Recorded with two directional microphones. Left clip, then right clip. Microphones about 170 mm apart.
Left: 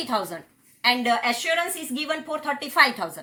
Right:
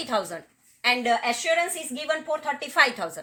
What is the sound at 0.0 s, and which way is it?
Speech, 30° right (ahead or behind).